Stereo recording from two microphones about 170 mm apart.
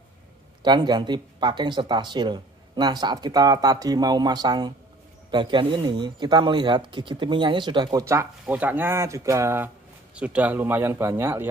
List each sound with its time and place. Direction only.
0.6 s a man's voice: 25° right (ahead or behind)